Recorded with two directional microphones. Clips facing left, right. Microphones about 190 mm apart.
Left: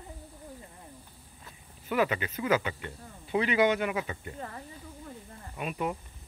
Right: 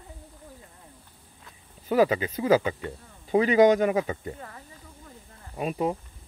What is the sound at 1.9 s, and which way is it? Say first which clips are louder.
Speech: right 6 dB; 35° right (ahead or behind).